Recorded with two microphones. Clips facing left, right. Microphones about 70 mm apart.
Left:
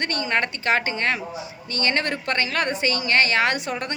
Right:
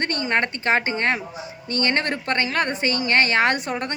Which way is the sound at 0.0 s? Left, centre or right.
Right.